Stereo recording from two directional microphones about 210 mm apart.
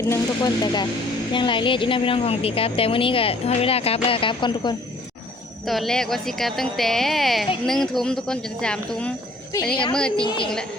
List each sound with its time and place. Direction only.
0.1 s a woman's voice: 20° left (ahead or behind)
5.6 s speech: centre (ahead or behind)
10.2 s a woman's voice: 25° left (ahead or behind)